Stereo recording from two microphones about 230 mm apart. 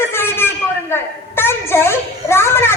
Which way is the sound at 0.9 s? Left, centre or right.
Centre.